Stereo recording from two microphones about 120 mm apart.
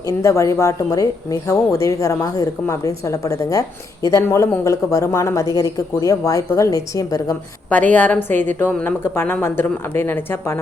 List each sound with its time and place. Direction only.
0.1 s speech: 25° left (ahead or behind)
7.7 s a woman's voice: 15° left (ahead or behind)